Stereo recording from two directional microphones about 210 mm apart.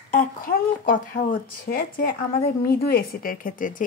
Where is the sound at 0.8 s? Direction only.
40° left (ahead or behind).